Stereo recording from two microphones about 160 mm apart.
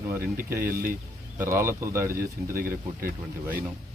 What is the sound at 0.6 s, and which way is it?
Speech, 60° right (ahead or behind).